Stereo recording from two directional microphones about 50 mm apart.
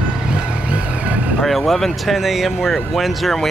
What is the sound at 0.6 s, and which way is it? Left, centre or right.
Vehicle, right.